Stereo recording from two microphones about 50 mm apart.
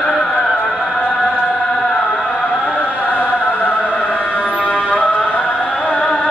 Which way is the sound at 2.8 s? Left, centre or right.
Left.